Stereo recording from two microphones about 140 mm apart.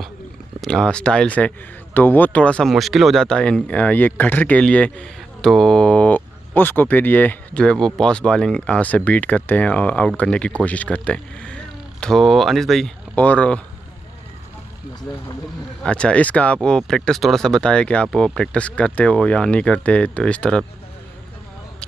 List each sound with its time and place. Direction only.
0.6 s speech: 5° left (ahead or behind)
15.8 s speech: 10° left (ahead or behind)